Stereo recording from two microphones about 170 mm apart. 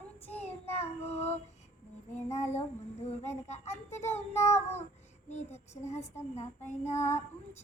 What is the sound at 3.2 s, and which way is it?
A child's voice, 40° left (ahead or behind).